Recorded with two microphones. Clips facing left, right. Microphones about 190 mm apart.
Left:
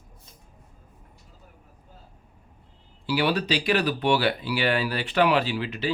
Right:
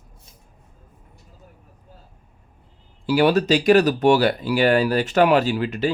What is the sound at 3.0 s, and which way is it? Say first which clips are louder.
Speech: right 7 dB; 45° right (ahead or behind).